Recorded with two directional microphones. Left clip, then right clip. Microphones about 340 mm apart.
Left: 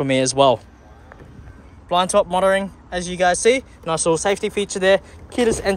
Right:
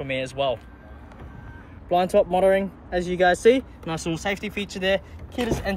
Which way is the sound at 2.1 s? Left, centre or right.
Left.